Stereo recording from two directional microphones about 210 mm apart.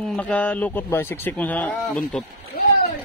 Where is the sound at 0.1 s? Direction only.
5° left (ahead or behind).